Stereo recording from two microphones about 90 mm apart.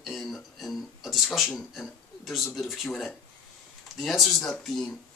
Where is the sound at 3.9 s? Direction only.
Centre (ahead or behind).